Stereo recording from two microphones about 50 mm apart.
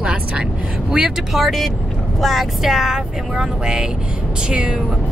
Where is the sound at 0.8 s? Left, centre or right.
Centre.